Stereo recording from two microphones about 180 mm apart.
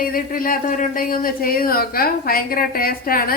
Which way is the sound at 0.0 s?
50° left (ahead or behind).